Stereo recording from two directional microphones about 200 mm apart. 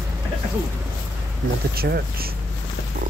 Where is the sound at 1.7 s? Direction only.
50° right (ahead or behind).